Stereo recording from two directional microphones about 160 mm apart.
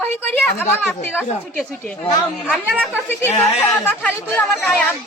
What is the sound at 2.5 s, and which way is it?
Speech, 5° right (ahead or behind).